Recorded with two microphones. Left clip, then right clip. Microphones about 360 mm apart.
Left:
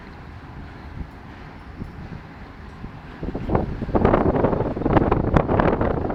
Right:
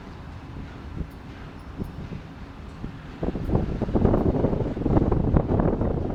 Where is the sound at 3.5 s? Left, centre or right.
Left.